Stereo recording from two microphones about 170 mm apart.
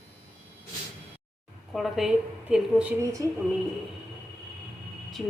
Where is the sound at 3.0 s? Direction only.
20° right (ahead or behind).